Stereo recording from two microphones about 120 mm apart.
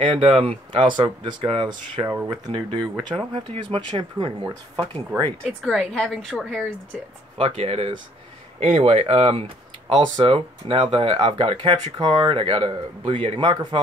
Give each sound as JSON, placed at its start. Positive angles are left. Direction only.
{"t": 0.0, "sound": "speech", "side_deg": -45}
{"t": 2.0, "sound": "speech", "side_deg": -30}
{"t": 2.5, "sound": "speech", "side_deg": -40}
{"t": 5.4, "sound": "a woman's voice", "side_deg": 5}
{"t": 7.3, "sound": "speech", "side_deg": -55}